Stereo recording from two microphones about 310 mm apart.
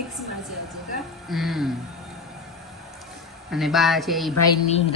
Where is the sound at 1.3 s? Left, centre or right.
Centre.